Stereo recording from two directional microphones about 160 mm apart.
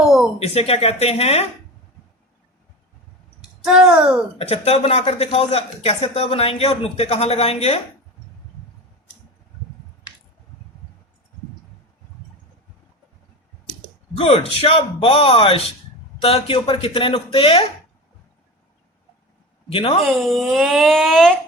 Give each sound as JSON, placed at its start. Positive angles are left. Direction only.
{"t": 0.0, "sound": "a sound", "side_deg": -5}
{"t": 0.3, "sound": "a man's voice", "side_deg": 40}
{"t": 3.6, "sound": "speech", "side_deg": -5}
{"t": 4.4, "sound": "a man's voice", "side_deg": 40}
{"t": 14.2, "sound": "a man's voice", "side_deg": 35}
{"t": 19.7, "sound": "a man's voice", "side_deg": 35}
{"t": 20.0, "sound": "speech", "side_deg": 0}